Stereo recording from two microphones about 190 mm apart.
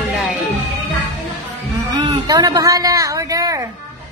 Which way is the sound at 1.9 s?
25° right (ahead or behind).